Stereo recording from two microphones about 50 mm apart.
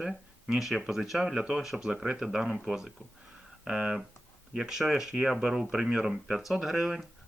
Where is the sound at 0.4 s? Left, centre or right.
Centre.